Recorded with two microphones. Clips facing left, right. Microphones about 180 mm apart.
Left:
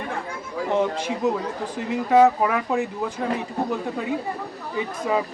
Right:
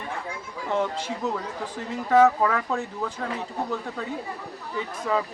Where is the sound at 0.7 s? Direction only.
15° left (ahead or behind).